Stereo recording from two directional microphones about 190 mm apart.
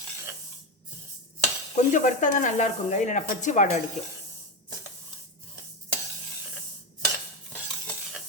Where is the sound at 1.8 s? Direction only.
40° left (ahead or behind).